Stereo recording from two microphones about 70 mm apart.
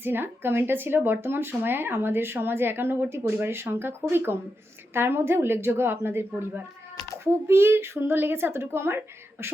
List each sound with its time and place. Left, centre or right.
0.0 s speech: right
4.9 s speech: right